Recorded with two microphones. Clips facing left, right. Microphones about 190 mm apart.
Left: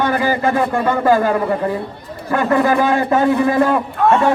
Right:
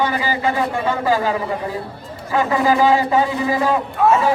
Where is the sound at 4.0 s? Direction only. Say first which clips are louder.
Left 1 dB; centre (ahead or behind).